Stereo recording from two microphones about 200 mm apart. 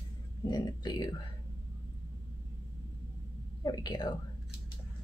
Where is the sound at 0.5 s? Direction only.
20° left (ahead or behind).